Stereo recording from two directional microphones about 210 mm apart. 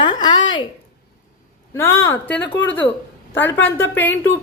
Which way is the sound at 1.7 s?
10° left (ahead or behind).